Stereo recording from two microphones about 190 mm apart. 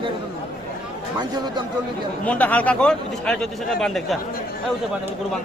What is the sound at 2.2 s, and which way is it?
Speech, 10° left (ahead or behind).